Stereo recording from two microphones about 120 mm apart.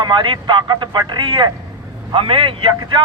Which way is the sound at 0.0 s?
40° right (ahead or behind).